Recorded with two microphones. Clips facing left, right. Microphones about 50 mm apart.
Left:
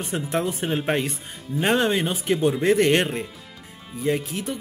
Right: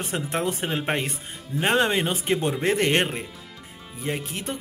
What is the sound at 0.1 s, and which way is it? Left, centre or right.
Speech, right.